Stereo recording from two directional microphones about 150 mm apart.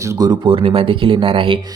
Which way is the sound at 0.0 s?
25° right (ahead or behind).